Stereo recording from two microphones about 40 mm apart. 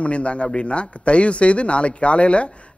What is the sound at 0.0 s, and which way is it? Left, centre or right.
A man's voice, left.